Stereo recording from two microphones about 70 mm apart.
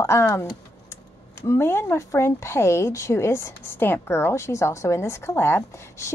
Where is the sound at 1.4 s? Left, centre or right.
Left.